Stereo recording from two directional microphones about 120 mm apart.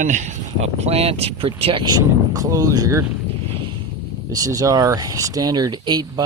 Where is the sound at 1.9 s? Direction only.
30° right (ahead or behind).